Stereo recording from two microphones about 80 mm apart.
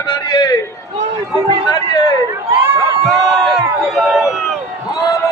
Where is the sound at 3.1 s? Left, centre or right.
Centre.